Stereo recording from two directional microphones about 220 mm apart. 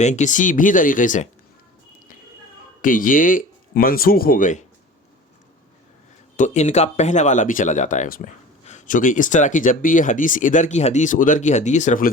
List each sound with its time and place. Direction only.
0.0 s speech: 35° left (ahead or behind)
2.8 s speech: 35° left (ahead or behind)
6.3 s speech: 30° left (ahead or behind)